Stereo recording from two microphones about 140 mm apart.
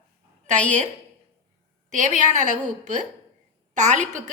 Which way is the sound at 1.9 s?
65° right (ahead or behind).